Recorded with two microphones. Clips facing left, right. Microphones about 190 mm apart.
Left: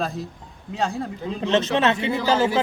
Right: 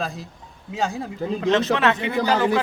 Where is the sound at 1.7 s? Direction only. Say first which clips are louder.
Even; 25° left (ahead or behind).